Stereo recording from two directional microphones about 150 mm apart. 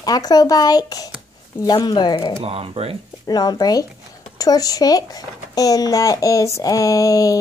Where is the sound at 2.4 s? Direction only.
40° right (ahead or behind).